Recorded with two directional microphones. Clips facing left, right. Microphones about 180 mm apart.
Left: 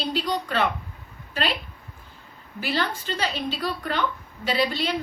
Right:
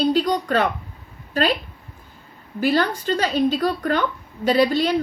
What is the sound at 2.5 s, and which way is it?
A woman's voice, 45° right (ahead or behind).